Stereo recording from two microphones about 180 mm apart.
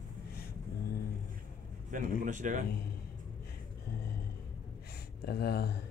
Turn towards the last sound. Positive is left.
turn(degrees=60)  # may be behind; listen again after turning